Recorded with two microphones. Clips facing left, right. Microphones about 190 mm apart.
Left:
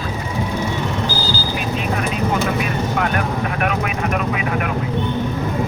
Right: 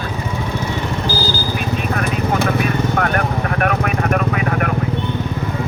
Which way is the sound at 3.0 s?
55° right (ahead or behind).